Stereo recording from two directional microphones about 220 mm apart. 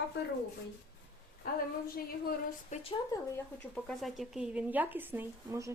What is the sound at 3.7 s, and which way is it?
Speech, centre (ahead or behind).